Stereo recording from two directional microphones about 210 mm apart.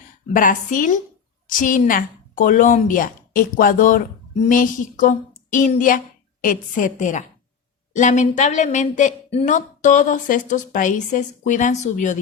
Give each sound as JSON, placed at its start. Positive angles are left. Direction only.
{"t": 0.3, "sound": "a woman's voice", "side_deg": 40}